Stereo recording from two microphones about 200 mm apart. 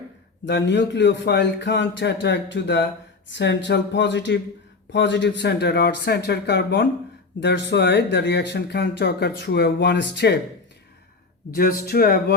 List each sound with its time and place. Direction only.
0.4 s speech: 60° left (ahead or behind)
11.5 s speech: 45° left (ahead or behind)